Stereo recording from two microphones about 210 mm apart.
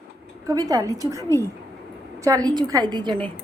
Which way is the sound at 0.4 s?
15° right (ahead or behind).